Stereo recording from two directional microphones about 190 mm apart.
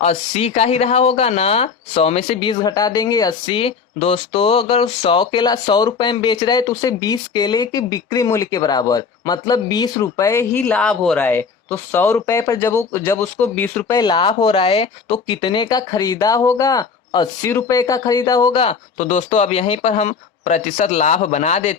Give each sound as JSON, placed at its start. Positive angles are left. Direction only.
{"t": 0.0, "sound": "speech", "side_deg": 30}